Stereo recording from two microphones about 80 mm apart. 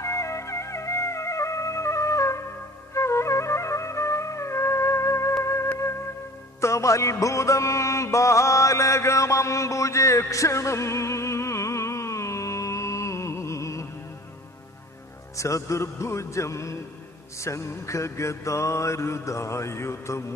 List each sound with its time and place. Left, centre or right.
0.0 s music: left
2.9 s flute: left
6.6 s music: left
15.3 s mantra: left